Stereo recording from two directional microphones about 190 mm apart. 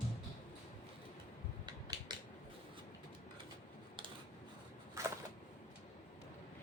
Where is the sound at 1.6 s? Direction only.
20° right (ahead or behind).